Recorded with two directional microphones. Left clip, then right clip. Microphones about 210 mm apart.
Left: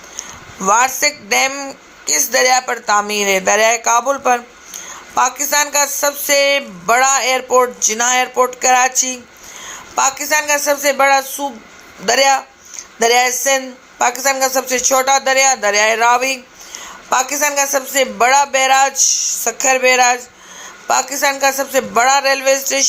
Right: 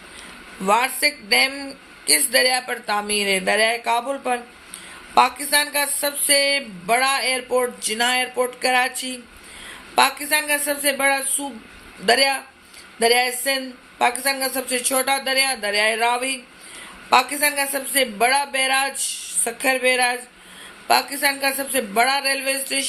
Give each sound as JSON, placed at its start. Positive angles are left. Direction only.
{"t": 0.6, "sound": "speech", "side_deg": 15}